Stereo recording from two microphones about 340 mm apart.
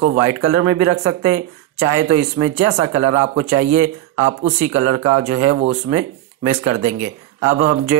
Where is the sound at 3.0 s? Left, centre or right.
Right.